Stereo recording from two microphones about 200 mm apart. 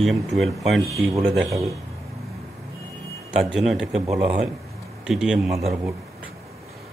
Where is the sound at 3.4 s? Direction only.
Centre (ahead or behind).